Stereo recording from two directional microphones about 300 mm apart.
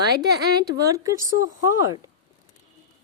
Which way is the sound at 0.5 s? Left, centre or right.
Centre.